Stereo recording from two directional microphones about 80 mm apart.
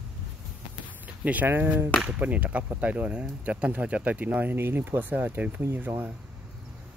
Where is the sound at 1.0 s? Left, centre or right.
Centre.